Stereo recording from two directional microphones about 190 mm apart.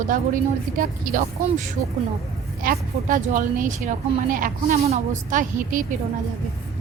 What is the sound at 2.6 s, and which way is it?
Speech, 45° right (ahead or behind).